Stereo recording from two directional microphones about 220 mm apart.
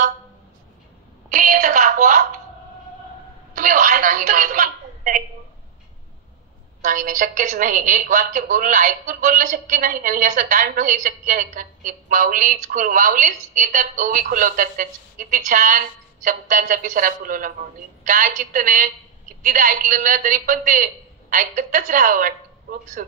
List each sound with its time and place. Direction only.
1.3 s a sound: 40° right (ahead or behind)
3.5 s telephone: 35° right (ahead or behind)
6.8 s a woman's voice: 35° right (ahead or behind)